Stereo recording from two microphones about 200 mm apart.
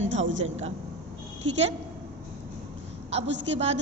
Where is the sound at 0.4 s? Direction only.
30° right (ahead or behind).